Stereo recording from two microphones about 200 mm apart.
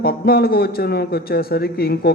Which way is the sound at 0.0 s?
50° left (ahead or behind).